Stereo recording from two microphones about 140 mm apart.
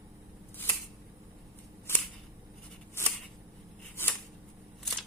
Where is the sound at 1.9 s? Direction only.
15° left (ahead or behind).